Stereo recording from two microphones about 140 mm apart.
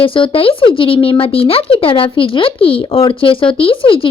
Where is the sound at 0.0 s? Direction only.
40° left (ahead or behind).